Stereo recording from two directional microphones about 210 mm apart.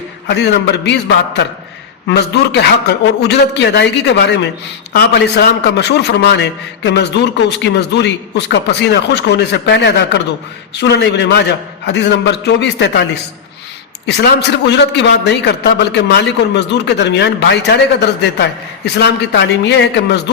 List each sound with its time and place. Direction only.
0.3 s a man's voice: 55° left (ahead or behind)
14.1 s a man's voice: 50° left (ahead or behind)